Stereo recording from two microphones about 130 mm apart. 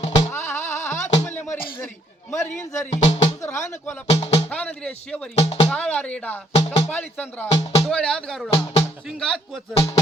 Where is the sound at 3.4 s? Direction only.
20° left (ahead or behind).